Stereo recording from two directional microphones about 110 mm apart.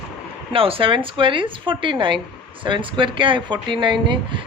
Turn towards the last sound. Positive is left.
turn(degrees=-45)  # may be behind; listen again after turning